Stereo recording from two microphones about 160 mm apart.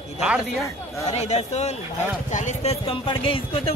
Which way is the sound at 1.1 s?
45° left (ahead or behind).